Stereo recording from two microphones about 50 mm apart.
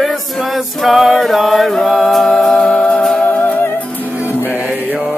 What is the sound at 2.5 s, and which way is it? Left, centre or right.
Music, centre.